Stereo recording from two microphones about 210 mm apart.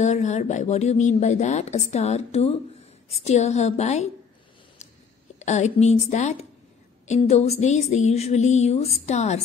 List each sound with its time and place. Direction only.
0.0 s speech: 35° left (ahead or behind)
5.4 s speech: 35° left (ahead or behind)